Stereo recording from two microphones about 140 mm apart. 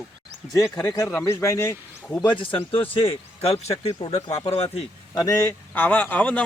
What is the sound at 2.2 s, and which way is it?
Speech, 40° left (ahead or behind).